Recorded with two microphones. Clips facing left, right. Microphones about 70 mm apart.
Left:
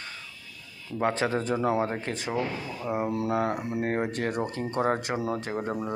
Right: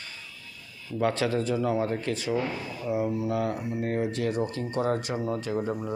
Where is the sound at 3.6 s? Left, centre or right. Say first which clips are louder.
Left 1 dB; left.